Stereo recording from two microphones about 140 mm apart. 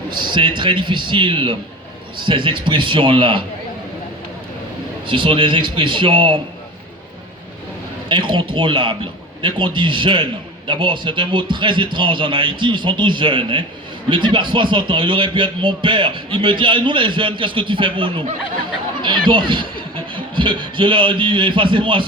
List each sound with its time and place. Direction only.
0.2 s a man's voice: 35° right (ahead or behind)
5.0 s a man's voice: 40° right (ahead or behind)
8.1 s a man's voice: 35° right (ahead or behind)